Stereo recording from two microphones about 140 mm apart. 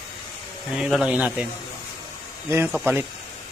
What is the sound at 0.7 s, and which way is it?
Snake, 5° right (ahead or behind).